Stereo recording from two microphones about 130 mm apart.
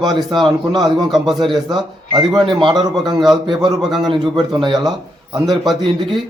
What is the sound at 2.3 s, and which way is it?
Speech, 40° right (ahead or behind).